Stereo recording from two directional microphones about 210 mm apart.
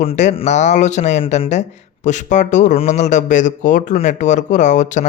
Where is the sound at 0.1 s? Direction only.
30° left (ahead or behind).